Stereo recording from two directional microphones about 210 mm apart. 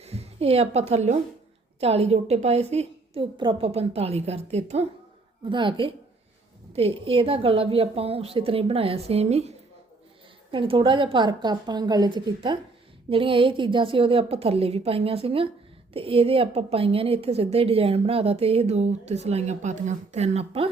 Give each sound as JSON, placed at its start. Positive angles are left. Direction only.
{"t": 0.0, "sound": "a woman's voice", "side_deg": -30}
{"t": 10.5, "sound": "a woman's voice", "side_deg": -25}